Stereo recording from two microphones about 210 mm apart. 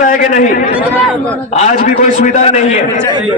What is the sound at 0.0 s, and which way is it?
A man's voice, 40° left (ahead or behind).